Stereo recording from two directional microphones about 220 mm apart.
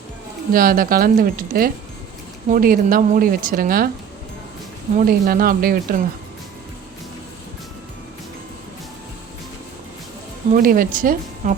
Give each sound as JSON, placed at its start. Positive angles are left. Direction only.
{"t": 0.5, "sound": "speech", "side_deg": -40}
{"t": 4.9, "sound": "speech", "side_deg": -40}
{"t": 10.5, "sound": "speech", "side_deg": -40}